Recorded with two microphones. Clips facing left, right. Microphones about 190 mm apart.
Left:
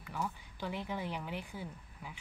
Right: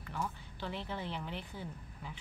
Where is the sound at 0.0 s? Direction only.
10° left (ahead or behind).